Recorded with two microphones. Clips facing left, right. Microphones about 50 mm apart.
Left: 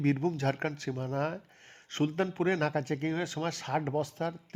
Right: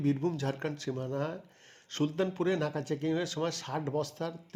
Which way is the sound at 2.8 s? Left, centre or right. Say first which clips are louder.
Right 1 dB; left.